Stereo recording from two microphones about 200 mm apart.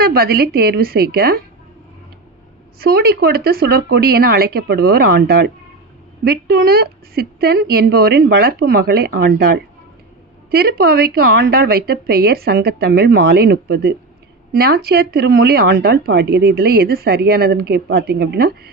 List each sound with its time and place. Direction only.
0.0 s speech: 50° right (ahead or behind)
2.7 s speech: 50° right (ahead or behind)